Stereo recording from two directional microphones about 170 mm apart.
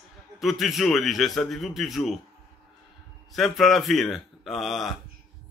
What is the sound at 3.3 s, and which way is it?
A man's voice, centre (ahead or behind).